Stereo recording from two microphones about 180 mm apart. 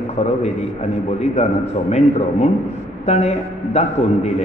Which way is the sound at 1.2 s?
40° left (ahead or behind).